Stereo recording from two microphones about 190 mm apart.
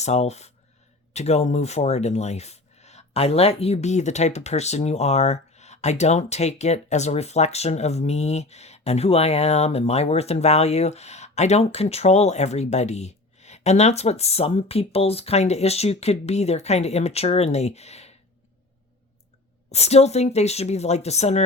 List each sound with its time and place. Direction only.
0.0 s speech: 35° left (ahead or behind)
19.7 s speech: 35° left (ahead or behind)